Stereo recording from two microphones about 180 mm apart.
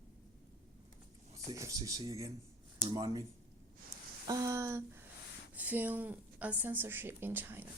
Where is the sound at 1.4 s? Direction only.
20° right (ahead or behind).